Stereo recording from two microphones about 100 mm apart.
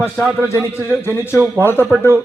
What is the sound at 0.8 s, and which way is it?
A man's voice, 25° left (ahead or behind).